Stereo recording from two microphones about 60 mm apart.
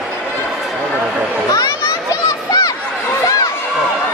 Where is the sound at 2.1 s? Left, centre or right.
Left.